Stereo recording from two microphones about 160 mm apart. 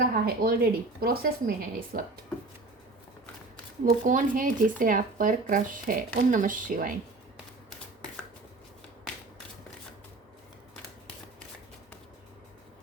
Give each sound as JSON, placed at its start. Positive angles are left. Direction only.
{"t": 0.0, "sound": "a woman's voice", "side_deg": -75}
{"t": 3.8, "sound": "speech", "side_deg": -55}